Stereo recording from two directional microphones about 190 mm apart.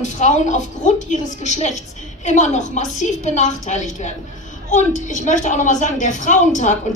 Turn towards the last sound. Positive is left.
turn(degrees=40)  # may be behind; listen again after turning